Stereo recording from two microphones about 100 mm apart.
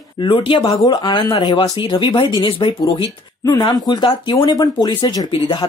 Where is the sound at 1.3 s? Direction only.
60° left (ahead or behind).